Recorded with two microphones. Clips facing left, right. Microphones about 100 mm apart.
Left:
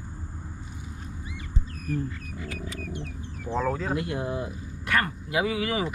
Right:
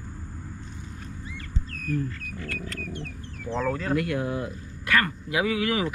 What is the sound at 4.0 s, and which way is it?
Speech, 20° left (ahead or behind).